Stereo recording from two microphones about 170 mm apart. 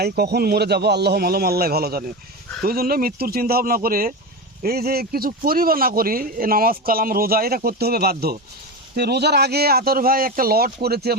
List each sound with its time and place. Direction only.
0.0 s speech: 70° right (ahead or behind)